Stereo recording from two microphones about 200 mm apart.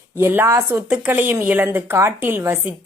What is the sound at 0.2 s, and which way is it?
Speech, 10° right (ahead or behind).